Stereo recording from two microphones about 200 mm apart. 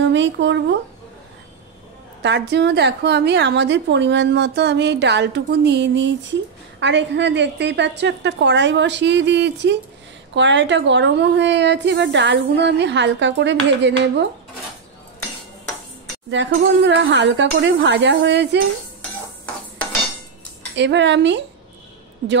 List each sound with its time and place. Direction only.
0.0 s a woman's voice: 65° right (ahead or behind)
2.2 s a woman's voice: 60° right (ahead or behind)
16.3 s a woman's voice: 65° right (ahead or behind)
20.7 s a woman's voice: 60° right (ahead or behind)